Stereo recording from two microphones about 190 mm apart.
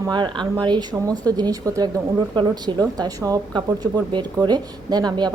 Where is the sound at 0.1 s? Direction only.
25° right (ahead or behind).